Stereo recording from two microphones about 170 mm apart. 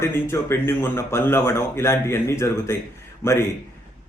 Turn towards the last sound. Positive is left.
turn(degrees=15)  # may be behind; listen again after turning